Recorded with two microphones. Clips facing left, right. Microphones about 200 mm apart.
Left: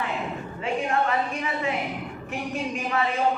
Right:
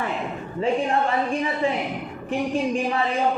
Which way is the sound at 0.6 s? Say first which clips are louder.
Right 4 dB; 30° right (ahead or behind).